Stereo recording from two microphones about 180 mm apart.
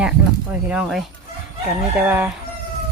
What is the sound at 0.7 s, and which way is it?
Speech, 5° right (ahead or behind).